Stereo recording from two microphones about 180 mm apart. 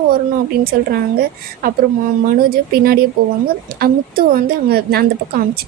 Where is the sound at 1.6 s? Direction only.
55° right (ahead or behind).